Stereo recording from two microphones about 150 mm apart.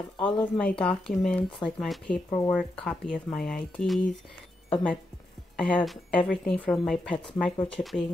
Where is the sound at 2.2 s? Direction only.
25° left (ahead or behind).